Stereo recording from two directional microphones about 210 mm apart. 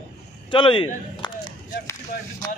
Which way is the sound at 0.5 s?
25° left (ahead or behind).